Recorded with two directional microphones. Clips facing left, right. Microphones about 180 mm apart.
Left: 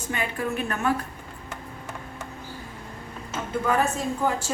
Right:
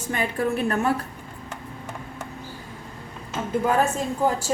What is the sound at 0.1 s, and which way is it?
Speech, 35° right (ahead or behind).